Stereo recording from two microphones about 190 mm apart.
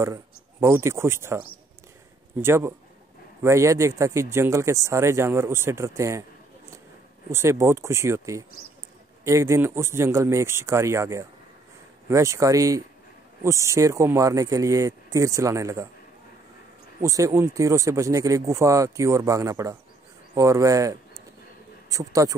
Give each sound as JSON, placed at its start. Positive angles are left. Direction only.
{"t": 0.0, "sound": "speech", "side_deg": -15}
{"t": 2.4, "sound": "speech", "side_deg": -15}
{"t": 7.2, "sound": "speech", "side_deg": -15}
{"t": 17.0, "sound": "speech", "side_deg": -15}